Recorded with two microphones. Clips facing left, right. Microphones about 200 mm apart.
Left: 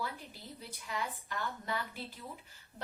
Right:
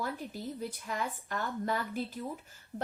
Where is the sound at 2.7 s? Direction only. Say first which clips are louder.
Right 8 dB; 50° right (ahead or behind).